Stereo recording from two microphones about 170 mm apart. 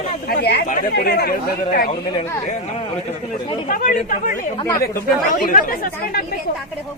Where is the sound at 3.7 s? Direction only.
55° left (ahead or behind).